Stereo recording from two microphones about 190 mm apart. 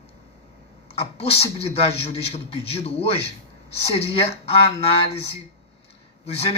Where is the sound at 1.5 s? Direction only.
30° left (ahead or behind).